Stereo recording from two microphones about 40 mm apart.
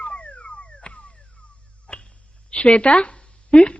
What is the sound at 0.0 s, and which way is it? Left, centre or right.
Music, left.